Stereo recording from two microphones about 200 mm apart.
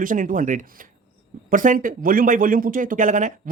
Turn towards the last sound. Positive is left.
turn(degrees=-40)  # may be behind; listen again after turning